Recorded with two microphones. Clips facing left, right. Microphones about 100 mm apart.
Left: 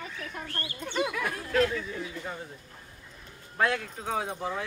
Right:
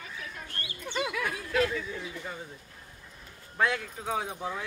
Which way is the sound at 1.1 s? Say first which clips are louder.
Left 2 dB; centre (ahead or behind).